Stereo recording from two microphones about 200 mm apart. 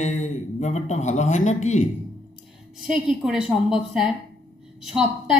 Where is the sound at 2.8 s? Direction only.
Centre (ahead or behind).